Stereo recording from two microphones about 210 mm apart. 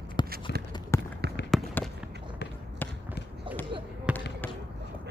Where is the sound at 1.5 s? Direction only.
Centre (ahead or behind).